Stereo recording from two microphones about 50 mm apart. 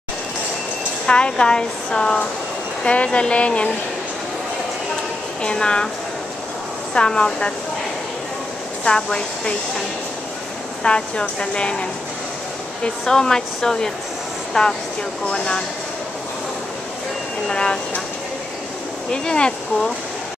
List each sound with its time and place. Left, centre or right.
1.0 s speech: centre
5.4 s speech: centre
6.9 s speech: centre
8.8 s speech: centre
10.8 s speech: centre
12.8 s speech: centre
17.5 s speech: centre
19.0 s speech: centre